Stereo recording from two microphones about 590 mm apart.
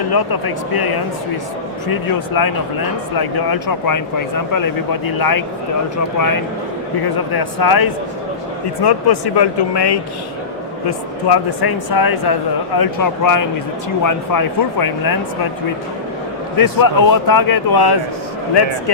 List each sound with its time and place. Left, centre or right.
0.1 s speech: left
16.6 s speech: left